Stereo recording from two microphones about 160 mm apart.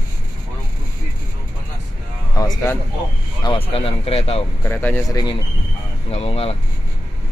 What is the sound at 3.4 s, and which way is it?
Speech, 35° left (ahead or behind).